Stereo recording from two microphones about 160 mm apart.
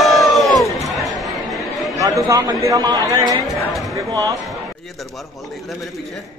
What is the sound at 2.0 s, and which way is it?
A man's voice, 20° right (ahead or behind).